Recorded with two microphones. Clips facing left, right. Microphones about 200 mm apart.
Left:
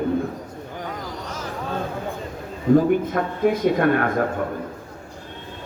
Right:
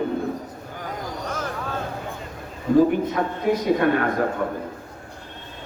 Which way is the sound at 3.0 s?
50° left (ahead or behind).